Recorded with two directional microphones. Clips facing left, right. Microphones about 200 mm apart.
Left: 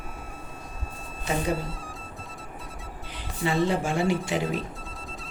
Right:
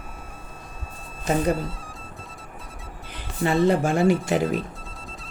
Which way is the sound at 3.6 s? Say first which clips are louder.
Right 6 dB; 50° right (ahead or behind).